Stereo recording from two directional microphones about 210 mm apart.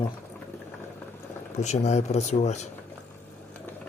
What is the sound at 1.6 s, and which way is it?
Speech, 30° left (ahead or behind).